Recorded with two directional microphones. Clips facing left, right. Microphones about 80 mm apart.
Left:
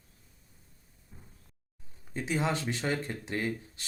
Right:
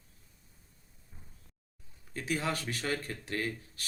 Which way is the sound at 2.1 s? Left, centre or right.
Left.